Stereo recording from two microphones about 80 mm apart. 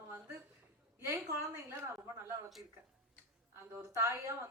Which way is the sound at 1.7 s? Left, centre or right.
Right.